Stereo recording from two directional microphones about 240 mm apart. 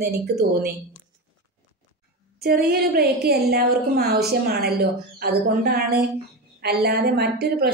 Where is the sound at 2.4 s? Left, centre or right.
Right.